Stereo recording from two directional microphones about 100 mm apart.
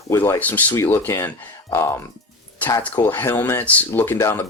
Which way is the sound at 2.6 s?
15° left (ahead or behind).